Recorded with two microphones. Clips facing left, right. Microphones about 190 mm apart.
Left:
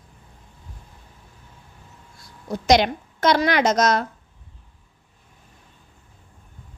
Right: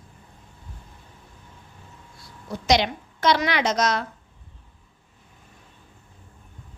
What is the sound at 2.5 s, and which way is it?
A woman's voice, 50° left (ahead or behind).